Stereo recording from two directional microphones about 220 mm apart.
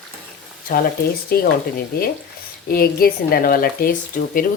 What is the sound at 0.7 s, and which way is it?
Speech, 40° left (ahead or behind).